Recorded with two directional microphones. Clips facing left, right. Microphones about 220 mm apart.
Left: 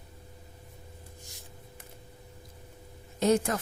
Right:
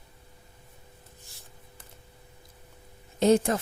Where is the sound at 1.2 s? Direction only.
15° left (ahead or behind).